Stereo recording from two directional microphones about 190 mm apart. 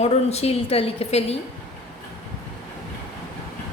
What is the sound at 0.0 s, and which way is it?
A woman's voice, 35° left (ahead or behind).